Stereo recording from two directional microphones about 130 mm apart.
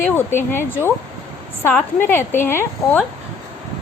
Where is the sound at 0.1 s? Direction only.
15° left (ahead or behind).